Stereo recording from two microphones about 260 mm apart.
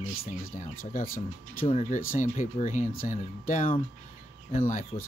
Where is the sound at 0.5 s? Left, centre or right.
Left.